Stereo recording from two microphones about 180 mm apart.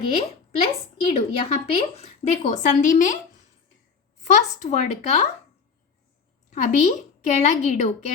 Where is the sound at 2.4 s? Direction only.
45° left (ahead or behind).